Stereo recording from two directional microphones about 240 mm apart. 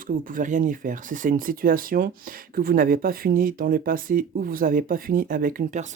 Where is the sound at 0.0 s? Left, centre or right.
Right.